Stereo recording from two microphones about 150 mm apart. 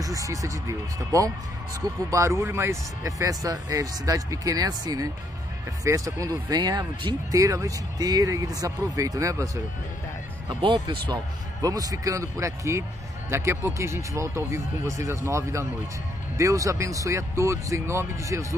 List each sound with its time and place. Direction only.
0.0 s speech: 20° right (ahead or behind)
10.6 s speech: 30° right (ahead or behind)